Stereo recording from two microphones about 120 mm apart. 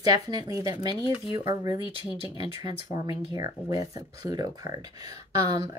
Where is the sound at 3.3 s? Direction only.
35° right (ahead or behind).